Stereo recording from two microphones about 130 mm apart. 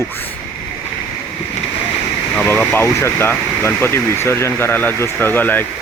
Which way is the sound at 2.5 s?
15° left (ahead or behind).